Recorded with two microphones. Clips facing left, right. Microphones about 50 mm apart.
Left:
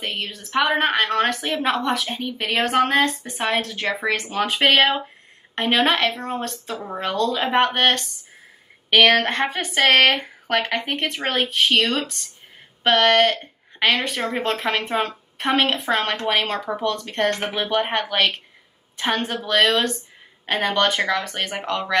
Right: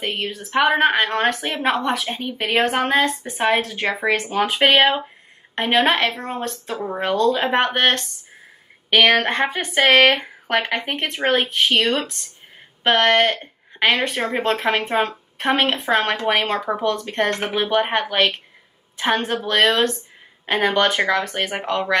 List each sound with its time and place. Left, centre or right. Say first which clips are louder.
0.0 s a woman's voice: right 3 dB; centre
8.9 s a woman's voice: even; centre
14.4 s a woman's voice: right 4 dB; centre